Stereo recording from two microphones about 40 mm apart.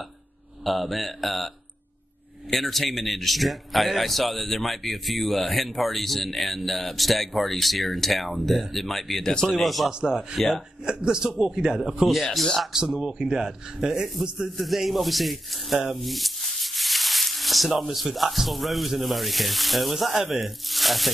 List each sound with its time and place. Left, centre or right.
0.7 s a man's voice: centre
2.5 s a man's voice: centre
9.8 s speech: right
10.1 s a man's voice: centre
10.9 s speech: centre
14.6 s a man's voice: centre
16.0 s sanding: centre